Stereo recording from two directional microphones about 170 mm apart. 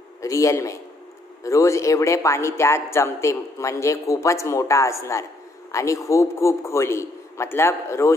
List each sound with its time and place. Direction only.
0.2 s a man's voice: 20° left (ahead or behind)